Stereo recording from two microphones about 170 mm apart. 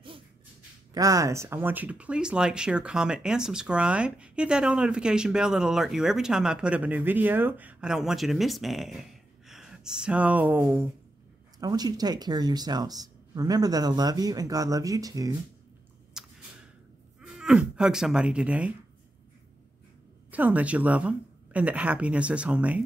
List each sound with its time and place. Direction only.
0.9 s speech: 20° right (ahead or behind)
11.6 s speech: 25° right (ahead or behind)
16.1 s a sound: 5° right (ahead or behind)
17.2 s speech: 5° right (ahead or behind)
20.2 s a woman's voice: 10° right (ahead or behind)